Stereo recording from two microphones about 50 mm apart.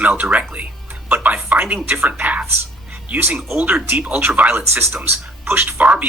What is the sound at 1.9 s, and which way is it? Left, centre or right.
Speech, right.